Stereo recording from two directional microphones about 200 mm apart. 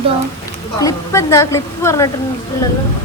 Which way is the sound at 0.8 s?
15° left (ahead or behind).